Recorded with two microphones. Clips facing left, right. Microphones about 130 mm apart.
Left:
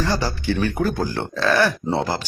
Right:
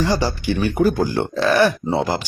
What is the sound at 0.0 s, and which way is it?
Speech, 15° right (ahead or behind).